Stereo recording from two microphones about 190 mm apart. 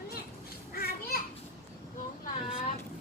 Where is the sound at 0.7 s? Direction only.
50° left (ahead or behind).